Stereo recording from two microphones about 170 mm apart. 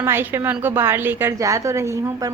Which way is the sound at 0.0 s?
10° right (ahead or behind).